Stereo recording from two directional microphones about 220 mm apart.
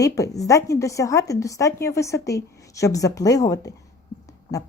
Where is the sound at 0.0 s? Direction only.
15° left (ahead or behind).